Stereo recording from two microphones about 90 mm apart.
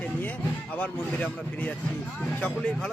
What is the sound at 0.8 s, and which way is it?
A man's voice, 15° left (ahead or behind).